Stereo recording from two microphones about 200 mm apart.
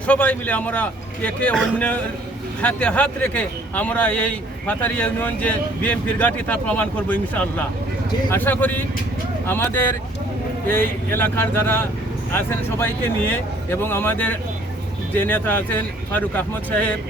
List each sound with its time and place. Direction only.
0.1 s a man's voice: 5° left (ahead or behind)